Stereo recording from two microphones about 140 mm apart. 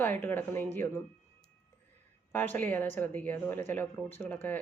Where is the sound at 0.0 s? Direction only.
15° left (ahead or behind).